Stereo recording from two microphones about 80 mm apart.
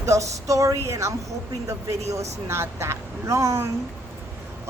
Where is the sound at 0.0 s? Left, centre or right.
Right.